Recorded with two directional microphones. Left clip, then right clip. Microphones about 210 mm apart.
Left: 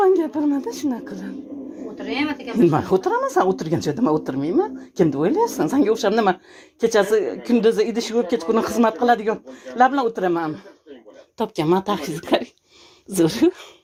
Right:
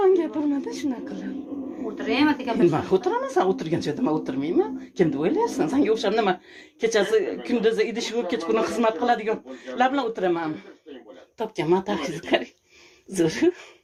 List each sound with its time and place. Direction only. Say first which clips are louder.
0.0 s a sound: left 3 dB; 40° left (ahead or behind)
0.6 s speech: left 3 dB; 40° left (ahead or behind)
2.6 s speech: left 6 dB; 40° left (ahead or behind)